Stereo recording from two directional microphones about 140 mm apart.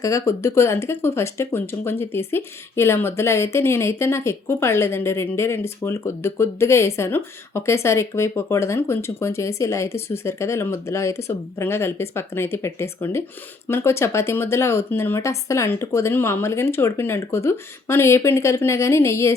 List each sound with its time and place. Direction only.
0.0 s speech: 20° left (ahead or behind)